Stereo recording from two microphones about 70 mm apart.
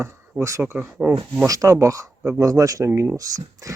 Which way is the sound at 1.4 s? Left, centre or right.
Right.